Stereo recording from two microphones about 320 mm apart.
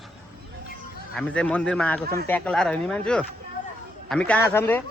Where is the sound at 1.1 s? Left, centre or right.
Centre.